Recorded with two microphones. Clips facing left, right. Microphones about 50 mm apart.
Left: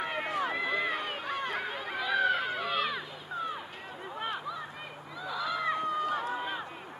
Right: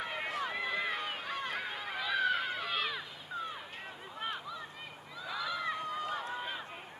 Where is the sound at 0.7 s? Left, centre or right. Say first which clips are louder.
Left 4 dB; centre.